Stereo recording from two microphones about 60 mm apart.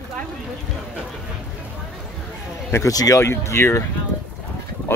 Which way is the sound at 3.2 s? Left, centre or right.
Left.